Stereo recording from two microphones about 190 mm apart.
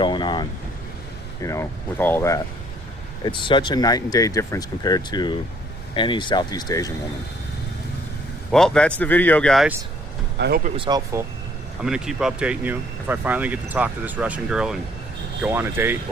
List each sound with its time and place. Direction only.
0.0 s vehicle: 25° left (ahead or behind)
1.4 s speech: 15° left (ahead or behind)
3.2 s speech: 25° left (ahead or behind)
8.5 s speech: 5° left (ahead or behind)
10.3 s speech: 60° right (ahead or behind)
10.8 s speech: 20° right (ahead or behind)
11.8 s speech: 5° right (ahead or behind)